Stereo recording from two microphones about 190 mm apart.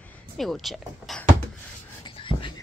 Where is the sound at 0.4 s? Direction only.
Centre (ahead or behind).